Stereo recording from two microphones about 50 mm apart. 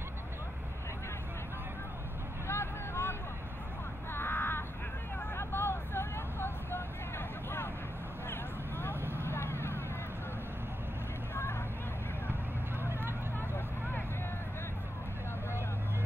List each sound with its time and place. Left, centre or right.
2.4 s vehicle: left
9.0 s vehicle: right
9.3 s vehicle: left
12.8 s vehicle: right